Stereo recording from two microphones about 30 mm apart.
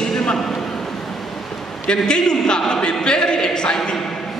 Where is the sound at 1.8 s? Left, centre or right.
Left.